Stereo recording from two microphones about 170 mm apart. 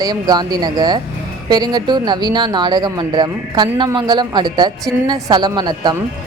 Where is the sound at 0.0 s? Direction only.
25° right (ahead or behind).